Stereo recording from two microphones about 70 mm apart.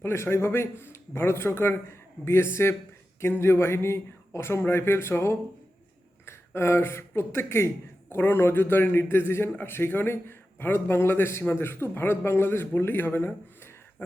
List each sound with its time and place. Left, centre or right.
0.0 s a man's voice: left